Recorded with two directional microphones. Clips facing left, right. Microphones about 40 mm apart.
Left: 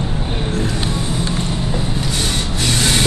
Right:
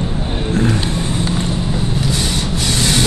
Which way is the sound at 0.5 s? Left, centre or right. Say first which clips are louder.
Right 6 dB; right.